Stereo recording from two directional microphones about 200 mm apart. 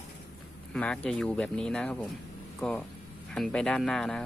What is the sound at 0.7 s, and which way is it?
Speech, 5° left (ahead or behind).